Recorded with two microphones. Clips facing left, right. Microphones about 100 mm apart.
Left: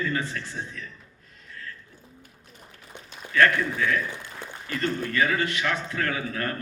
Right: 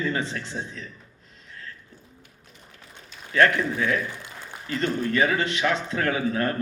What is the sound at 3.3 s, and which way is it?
A man's voice, 25° right (ahead or behind).